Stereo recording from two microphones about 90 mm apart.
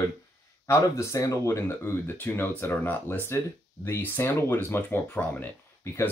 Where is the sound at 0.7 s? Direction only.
30° left (ahead or behind).